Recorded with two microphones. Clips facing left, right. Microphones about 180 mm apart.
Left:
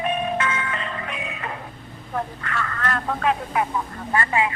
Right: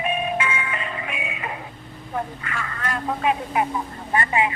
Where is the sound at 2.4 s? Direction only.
10° right (ahead or behind).